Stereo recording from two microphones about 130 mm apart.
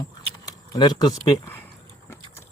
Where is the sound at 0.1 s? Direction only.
30° left (ahead or behind).